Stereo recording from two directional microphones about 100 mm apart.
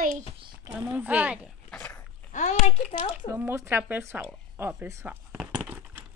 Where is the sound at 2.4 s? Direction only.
90° left.